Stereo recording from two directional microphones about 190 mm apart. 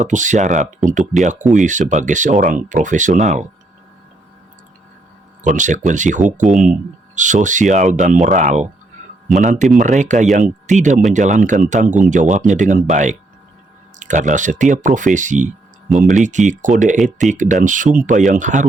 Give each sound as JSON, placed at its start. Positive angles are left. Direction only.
{"t": 0.0, "sound": "speech", "side_deg": -40}
{"t": 5.4, "sound": "speech", "side_deg": -40}